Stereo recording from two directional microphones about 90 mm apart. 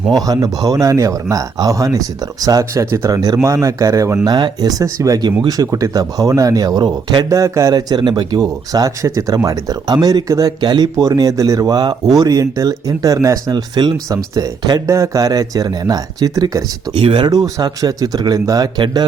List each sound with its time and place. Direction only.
0.3 s a man's voice: 45° right (ahead or behind)
7.3 s a man's voice: 35° right (ahead or behind)
13.7 s speech: 55° right (ahead or behind)
14.3 s a man's voice: 40° right (ahead or behind)
16.9 s speech: 70° right (ahead or behind)
17.2 s speech: 45° right (ahead or behind)